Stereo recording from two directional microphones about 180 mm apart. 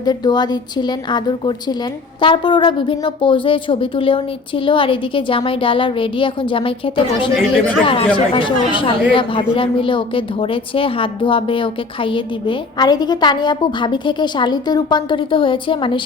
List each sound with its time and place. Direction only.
0.0 s speech: 25° left (ahead or behind)